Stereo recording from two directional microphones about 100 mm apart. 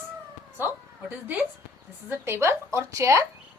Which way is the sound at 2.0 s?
25° right (ahead or behind).